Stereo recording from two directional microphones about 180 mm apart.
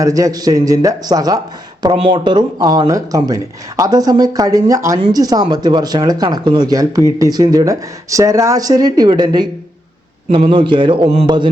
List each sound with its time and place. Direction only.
0.0 s speech: 20° right (ahead or behind)